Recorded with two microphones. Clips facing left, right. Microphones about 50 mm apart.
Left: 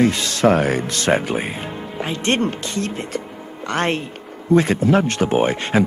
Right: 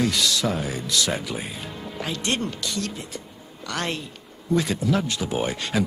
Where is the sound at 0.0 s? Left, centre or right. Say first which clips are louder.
Left 7 dB; left.